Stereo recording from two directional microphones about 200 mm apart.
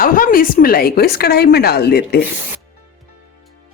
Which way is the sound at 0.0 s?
45° left (ahead or behind).